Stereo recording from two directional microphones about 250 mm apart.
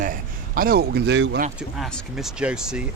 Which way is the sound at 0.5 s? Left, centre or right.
Right.